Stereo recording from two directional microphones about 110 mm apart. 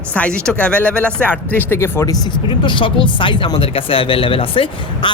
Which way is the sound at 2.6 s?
50° left (ahead or behind).